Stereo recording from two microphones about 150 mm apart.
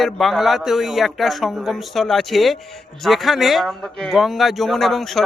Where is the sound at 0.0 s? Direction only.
Centre (ahead or behind).